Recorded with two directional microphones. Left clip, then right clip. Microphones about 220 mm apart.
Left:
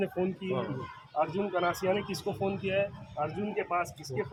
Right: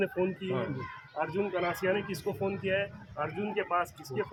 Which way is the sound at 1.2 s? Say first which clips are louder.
Left 2 dB; 15° left (ahead or behind).